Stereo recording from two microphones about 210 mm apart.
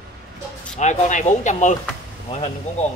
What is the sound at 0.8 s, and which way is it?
Speech, 35° left (ahead or behind).